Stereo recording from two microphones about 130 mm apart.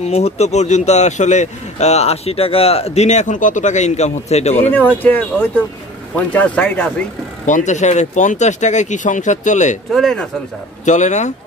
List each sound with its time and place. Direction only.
0.0 s a man's voice: 55° left (ahead or behind)
4.7 s speech: 15° left (ahead or behind)
7.4 s speech: 70° left (ahead or behind)
9.9 s speech: centre (ahead or behind)
10.9 s a man's voice: 65° left (ahead or behind)